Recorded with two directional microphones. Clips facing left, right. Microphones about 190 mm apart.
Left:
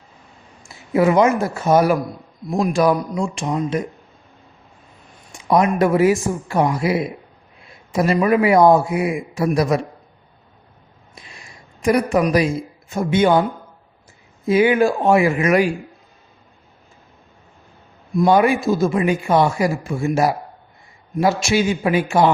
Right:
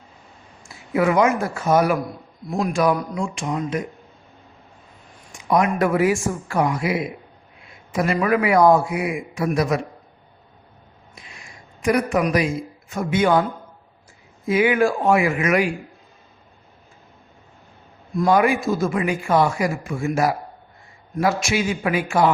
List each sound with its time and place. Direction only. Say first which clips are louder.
0.9 s a man's voice: left 3 dB; 25° left (ahead or behind)
5.5 s a man's voice: left 3 dB; 25° left (ahead or behind)
11.8 s a man's voice: left 3 dB; 30° left (ahead or behind)
14.4 s a man's voice: left 3 dB; 30° left (ahead or behind)
18.3 s a man's voice: left 2 dB; 25° left (ahead or behind)